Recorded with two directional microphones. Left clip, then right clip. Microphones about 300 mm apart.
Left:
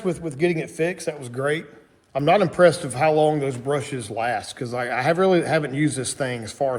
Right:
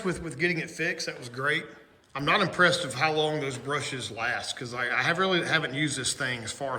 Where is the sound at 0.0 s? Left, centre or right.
Centre.